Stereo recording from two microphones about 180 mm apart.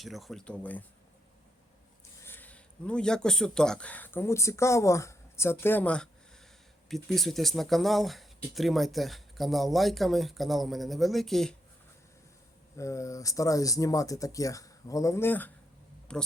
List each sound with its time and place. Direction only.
0.0 s speech: centre (ahead or behind)
2.2 s a man's voice: 10° left (ahead or behind)
12.7 s speech: 15° left (ahead or behind)